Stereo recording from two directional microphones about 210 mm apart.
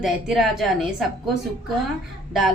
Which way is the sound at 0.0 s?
Centre (ahead or behind).